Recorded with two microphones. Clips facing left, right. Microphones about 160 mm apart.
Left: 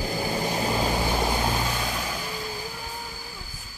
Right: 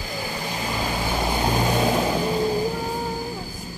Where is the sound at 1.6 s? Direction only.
35° right (ahead or behind).